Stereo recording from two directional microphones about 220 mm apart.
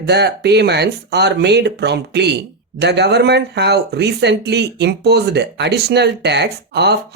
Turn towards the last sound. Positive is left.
turn(degrees=-50)  # may be behind; listen again after turning